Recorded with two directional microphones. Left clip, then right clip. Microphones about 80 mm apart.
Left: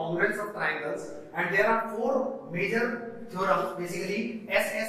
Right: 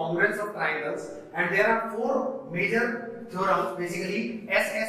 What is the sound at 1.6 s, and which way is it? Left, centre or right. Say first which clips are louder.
A man's voice: right 1 dB; centre.